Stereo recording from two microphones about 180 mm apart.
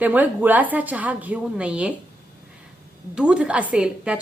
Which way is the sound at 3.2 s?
5° right (ahead or behind).